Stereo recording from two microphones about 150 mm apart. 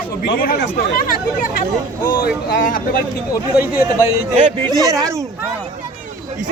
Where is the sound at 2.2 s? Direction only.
65° left (ahead or behind).